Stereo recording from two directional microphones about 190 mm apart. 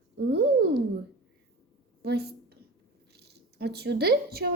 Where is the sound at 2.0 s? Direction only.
55° right (ahead or behind).